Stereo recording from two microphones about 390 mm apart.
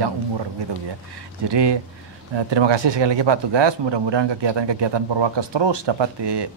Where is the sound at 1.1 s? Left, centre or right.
Right.